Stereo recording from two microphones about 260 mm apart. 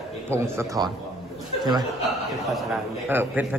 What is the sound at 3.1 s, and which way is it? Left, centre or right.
Speech, centre.